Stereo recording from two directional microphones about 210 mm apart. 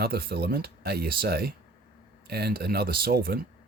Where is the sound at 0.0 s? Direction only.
45° right (ahead or behind).